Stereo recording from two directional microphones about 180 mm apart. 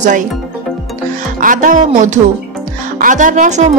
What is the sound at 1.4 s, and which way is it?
A woman's voice, 45° right (ahead or behind).